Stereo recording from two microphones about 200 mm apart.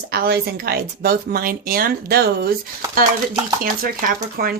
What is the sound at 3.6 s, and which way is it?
Speech, 45° right (ahead or behind).